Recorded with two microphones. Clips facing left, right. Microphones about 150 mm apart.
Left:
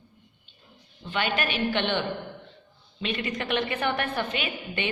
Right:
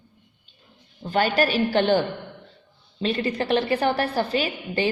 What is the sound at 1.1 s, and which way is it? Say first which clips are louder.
Speech: right 7 dB; 40° right (ahead or behind).